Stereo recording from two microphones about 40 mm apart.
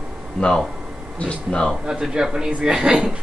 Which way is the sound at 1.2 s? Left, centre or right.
Left.